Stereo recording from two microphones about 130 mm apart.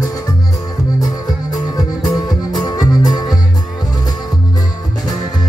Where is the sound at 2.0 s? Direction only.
30° left (ahead or behind).